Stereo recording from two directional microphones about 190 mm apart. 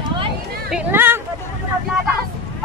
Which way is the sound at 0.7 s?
10° right (ahead or behind).